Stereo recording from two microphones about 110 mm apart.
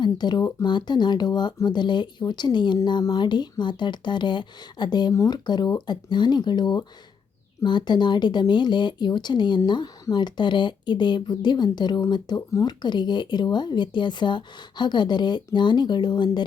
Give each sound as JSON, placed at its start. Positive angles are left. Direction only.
{"t": 0.0, "sound": "speech", "side_deg": 40}